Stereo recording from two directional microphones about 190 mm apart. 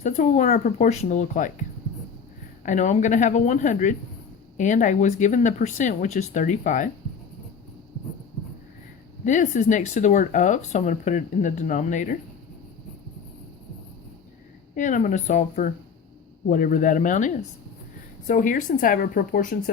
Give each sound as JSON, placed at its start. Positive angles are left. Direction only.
{"t": 0.0, "sound": "speech", "side_deg": 40}
{"t": 2.6, "sound": "speech", "side_deg": 40}
{"t": 9.2, "sound": "speech", "side_deg": 40}
{"t": 14.8, "sound": "speech", "side_deg": 40}